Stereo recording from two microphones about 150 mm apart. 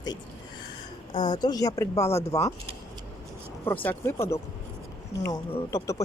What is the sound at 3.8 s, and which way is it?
Speech, 15° left (ahead or behind).